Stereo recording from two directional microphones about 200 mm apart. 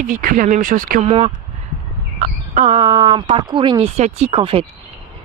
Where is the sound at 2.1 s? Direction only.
40° right (ahead or behind).